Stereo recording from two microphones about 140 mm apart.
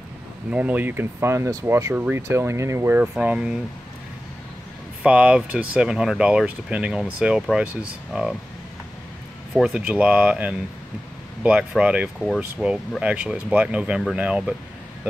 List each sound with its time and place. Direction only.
0.5 s speech: 10° right (ahead or behind)
3.0 s speech: 10° right (ahead or behind)
5.0 s speech: 10° right (ahead or behind)
9.5 s speech: 5° right (ahead or behind)